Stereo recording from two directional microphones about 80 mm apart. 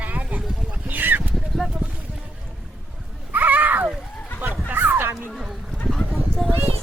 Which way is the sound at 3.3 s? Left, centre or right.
Right.